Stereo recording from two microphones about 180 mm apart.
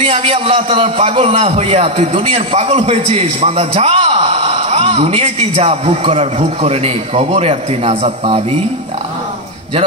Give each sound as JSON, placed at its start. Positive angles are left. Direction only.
{"t": 0.0, "sound": "a man's voice", "side_deg": -30}